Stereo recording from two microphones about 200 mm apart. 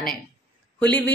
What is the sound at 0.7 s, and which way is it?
Speech, 10° left (ahead or behind).